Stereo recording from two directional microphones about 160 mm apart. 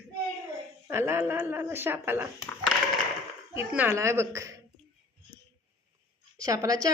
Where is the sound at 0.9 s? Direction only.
15° right (ahead or behind).